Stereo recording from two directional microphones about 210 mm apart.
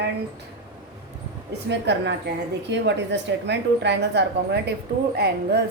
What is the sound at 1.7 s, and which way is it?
A woman's voice, 55° right (ahead or behind).